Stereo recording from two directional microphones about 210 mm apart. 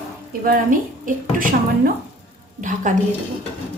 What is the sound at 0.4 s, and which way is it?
A woman's voice, 40° right (ahead or behind).